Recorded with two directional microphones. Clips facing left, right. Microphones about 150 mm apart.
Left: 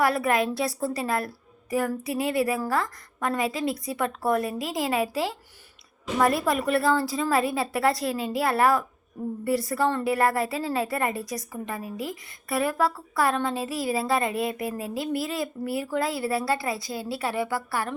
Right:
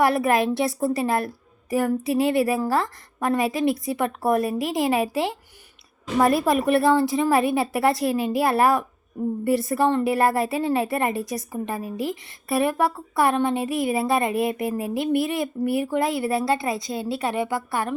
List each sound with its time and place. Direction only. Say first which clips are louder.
0.0 s a woman's voice: right 3 dB; 25° right (ahead or behind)